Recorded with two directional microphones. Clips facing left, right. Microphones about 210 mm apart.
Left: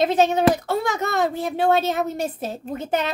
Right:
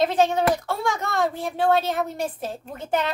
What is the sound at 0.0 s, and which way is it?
Speech, 20° left (ahead or behind).